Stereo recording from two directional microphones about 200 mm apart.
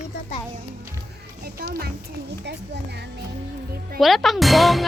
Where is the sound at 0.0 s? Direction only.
35° left (ahead or behind).